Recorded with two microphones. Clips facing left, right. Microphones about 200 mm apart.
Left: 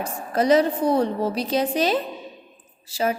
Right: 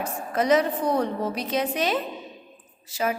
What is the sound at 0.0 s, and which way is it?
A woman's voice, 30° left (ahead or behind).